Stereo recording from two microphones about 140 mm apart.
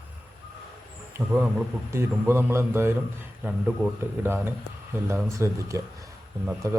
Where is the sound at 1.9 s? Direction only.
20° right (ahead or behind).